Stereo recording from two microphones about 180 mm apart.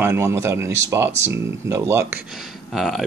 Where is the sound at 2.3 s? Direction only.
Centre (ahead or behind).